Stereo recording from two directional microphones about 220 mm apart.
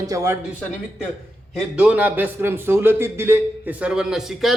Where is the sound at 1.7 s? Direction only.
5° right (ahead or behind).